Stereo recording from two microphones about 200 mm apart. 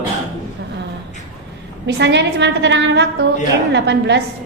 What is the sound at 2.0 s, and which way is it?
A woman's voice, 60° right (ahead or behind).